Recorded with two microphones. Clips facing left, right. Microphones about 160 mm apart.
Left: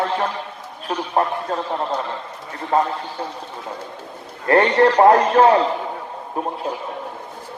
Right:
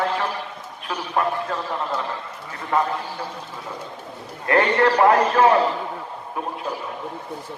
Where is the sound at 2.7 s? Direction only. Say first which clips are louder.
Left 3 dB; 35° left (ahead or behind).